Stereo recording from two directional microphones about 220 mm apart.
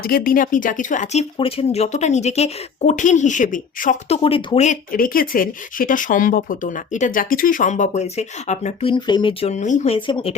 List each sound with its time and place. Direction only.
0.0 s speech: 40° left (ahead or behind)
4.2 s speech: 25° left (ahead or behind)